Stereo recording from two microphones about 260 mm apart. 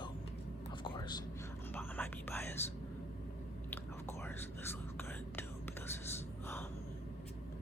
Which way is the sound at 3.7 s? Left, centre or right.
Centre.